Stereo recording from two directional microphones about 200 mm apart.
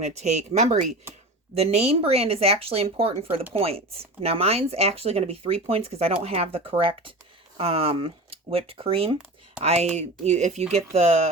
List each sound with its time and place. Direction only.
0.0 s speech: 35° right (ahead or behind)